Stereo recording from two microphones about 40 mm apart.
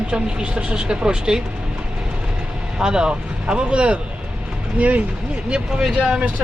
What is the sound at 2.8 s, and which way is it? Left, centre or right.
Speech, centre.